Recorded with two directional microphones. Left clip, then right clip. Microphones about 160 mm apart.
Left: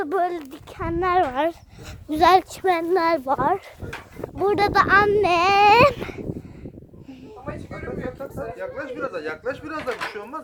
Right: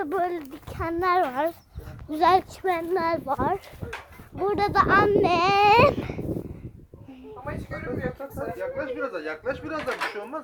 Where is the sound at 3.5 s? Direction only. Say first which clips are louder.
Left 4 dB; 55° left (ahead or behind).